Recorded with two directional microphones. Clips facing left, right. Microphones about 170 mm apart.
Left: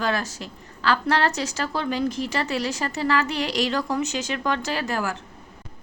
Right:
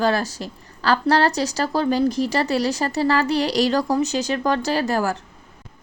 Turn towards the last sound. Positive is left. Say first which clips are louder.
# right 6 dB
turn(degrees=-35)  # may be behind; listen again after turning